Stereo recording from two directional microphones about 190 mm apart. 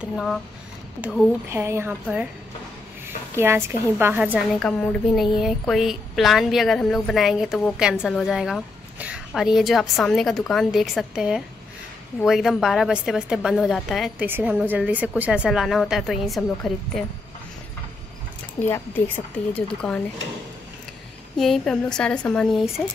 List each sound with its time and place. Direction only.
0.0 s a woman's voice: centre (ahead or behind)
1.5 s a woman's voice: 15° right (ahead or behind)
3.3 s a woman's voice: 15° right (ahead or behind)
4.6 s a woman's voice: 5° left (ahead or behind)
18.7 s speech: 10° left (ahead or behind)
21.4 s a woman's voice: centre (ahead or behind)